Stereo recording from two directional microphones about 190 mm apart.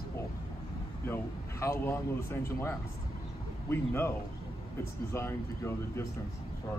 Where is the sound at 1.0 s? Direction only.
15° left (ahead or behind).